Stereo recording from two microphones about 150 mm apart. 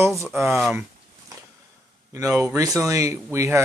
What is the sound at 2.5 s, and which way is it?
Speech, 20° right (ahead or behind).